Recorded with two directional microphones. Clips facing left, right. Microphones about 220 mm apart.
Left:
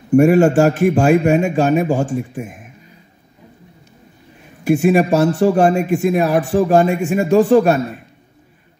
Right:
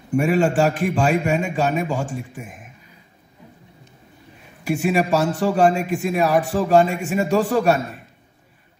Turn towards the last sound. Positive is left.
turn(degrees=45)  # may be behind; listen again after turning